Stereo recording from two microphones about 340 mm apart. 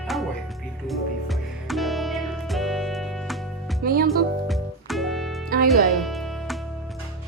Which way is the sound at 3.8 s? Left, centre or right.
Right.